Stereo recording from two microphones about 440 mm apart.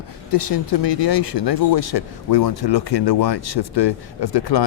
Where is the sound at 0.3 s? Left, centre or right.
Left.